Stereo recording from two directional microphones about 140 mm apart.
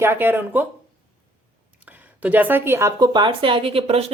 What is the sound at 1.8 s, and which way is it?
A woman's voice, 10° right (ahead or behind).